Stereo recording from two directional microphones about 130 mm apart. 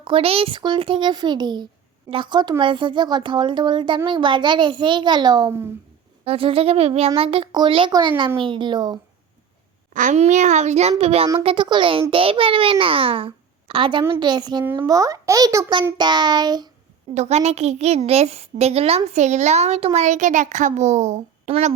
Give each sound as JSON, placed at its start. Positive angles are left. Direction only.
{"t": 0.0, "sound": "speech", "side_deg": -45}
{"t": 6.2, "sound": "speech", "side_deg": -45}
{"t": 9.9, "sound": "a child's voice", "side_deg": -75}
{"t": 14.6, "sound": "a child's voice", "side_deg": -15}
{"t": 17.2, "sound": "a child's voice", "side_deg": -55}